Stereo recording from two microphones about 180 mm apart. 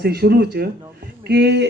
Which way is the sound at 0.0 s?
60° right (ahead or behind).